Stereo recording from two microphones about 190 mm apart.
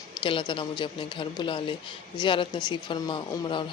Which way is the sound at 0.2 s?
25° left (ahead or behind).